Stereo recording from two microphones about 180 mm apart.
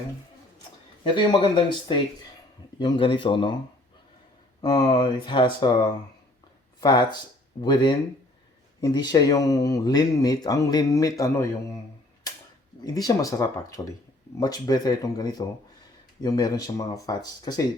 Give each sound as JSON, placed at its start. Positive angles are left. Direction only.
{"t": 1.0, "sound": "speech", "side_deg": 30}
{"t": 4.6, "sound": "speech", "side_deg": 20}
{"t": 6.7, "sound": "speech", "side_deg": 25}
{"t": 12.8, "sound": "speech", "side_deg": 20}